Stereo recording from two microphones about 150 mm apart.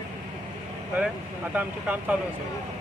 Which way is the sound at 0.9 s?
10° right (ahead or behind).